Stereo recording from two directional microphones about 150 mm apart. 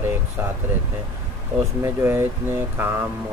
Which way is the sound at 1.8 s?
15° right (ahead or behind).